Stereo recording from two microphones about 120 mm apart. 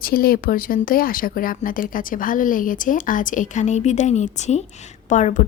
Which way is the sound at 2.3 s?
90° left.